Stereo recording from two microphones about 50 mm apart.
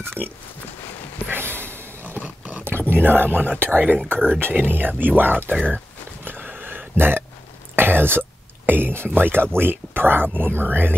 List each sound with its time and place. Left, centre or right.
0.2 s speech: left
1.2 s snort: right
2.2 s dog: right
2.6 s speech: right
6.2 s a sound: right
7.0 s speech: right
7.7 s a sound: right
8.6 s speech: right